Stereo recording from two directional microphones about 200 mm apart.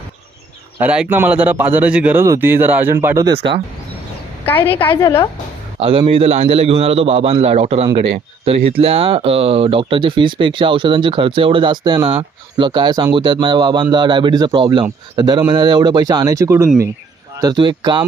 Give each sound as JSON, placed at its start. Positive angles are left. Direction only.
{"t": 0.8, "sound": "speech", "side_deg": -10}
{"t": 3.2, "sound": "speech", "side_deg": -25}
{"t": 4.4, "sound": "a woman's voice", "side_deg": 10}
{"t": 5.8, "sound": "speech", "side_deg": -25}